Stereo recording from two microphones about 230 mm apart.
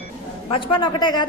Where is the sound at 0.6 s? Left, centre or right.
Left.